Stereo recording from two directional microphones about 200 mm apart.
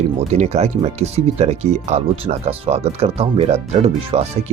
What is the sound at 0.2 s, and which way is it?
Speech, 35° right (ahead or behind).